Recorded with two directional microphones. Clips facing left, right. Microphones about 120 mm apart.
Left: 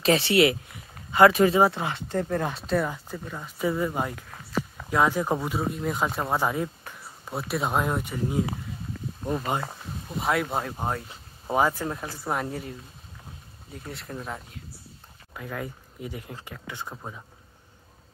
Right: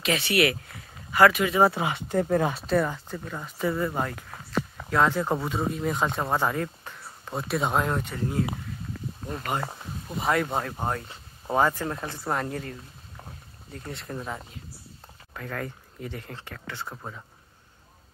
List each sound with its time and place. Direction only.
0.0 s speech: 30° left (ahead or behind)
1.7 s speech: 10° right (ahead or behind); by 9.6 s 15° left (ahead or behind)
9.7 s speech: 5° right (ahead or behind); by 17.2 s 15° left (ahead or behind)